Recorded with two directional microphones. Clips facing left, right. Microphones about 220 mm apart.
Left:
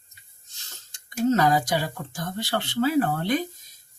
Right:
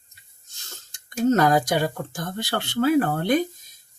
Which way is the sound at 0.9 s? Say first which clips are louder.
Right 2 dB; 50° right (ahead or behind).